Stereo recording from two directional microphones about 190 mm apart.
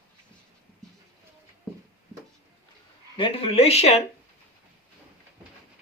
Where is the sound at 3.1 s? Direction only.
30° left (ahead or behind).